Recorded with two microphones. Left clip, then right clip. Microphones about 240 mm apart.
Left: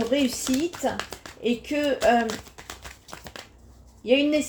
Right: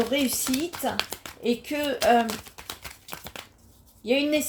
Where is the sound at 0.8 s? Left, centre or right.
Centre.